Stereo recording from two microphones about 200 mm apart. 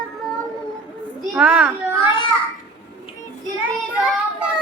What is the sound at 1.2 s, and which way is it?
Children playing, 5° right (ahead or behind).